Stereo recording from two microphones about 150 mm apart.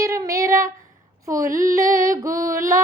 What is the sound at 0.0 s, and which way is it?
Child singing, 20° right (ahead or behind).